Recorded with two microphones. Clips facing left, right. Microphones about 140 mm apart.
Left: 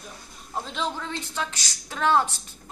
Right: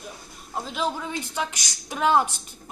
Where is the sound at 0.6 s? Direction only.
5° right (ahead or behind).